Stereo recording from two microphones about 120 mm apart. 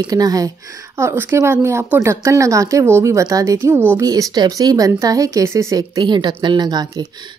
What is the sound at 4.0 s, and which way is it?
Speech, 30° right (ahead or behind).